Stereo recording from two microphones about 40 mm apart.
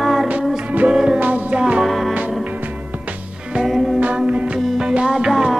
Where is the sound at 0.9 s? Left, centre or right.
Centre.